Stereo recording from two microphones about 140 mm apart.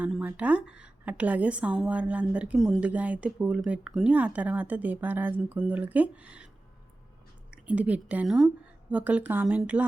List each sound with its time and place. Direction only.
0.0 s a woman's voice: 10° right (ahead or behind)
7.5 s a woman's voice: 10° right (ahead or behind)